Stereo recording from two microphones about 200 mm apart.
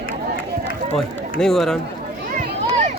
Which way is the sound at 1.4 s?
Centre (ahead or behind).